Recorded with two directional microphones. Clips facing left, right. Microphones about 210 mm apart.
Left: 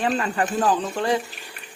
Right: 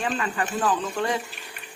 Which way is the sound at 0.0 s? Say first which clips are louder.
Left 4 dB; 40° left (ahead or behind).